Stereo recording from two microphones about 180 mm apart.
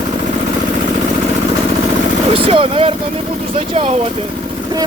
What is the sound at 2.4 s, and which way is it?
Speech, 30° right (ahead or behind).